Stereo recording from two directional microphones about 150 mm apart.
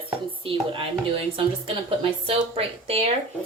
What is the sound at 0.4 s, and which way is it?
Speech, 35° right (ahead or behind).